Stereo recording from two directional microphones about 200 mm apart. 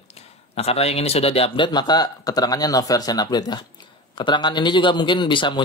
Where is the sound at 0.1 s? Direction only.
30° left (ahead or behind).